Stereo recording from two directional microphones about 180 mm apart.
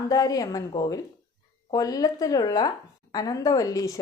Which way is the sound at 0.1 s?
20° left (ahead or behind).